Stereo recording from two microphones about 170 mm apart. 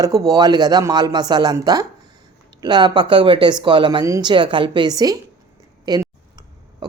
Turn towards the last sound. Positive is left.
turn(degrees=-25)  # may be behind; listen again after turning